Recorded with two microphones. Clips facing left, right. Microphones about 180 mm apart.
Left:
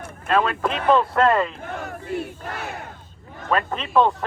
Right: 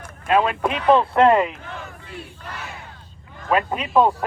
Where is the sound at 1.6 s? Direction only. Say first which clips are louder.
Left 4 dB; 45° left (ahead or behind).